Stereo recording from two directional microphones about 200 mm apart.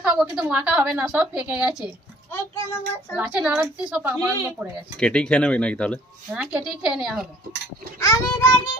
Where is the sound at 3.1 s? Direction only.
5° right (ahead or behind).